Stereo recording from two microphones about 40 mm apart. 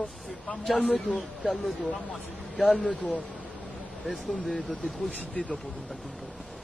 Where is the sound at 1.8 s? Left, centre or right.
Left.